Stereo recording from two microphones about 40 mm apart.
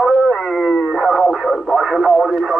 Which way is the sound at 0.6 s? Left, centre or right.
Centre.